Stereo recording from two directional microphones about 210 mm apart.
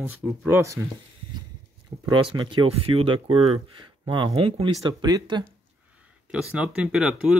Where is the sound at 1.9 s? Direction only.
20° right (ahead or behind).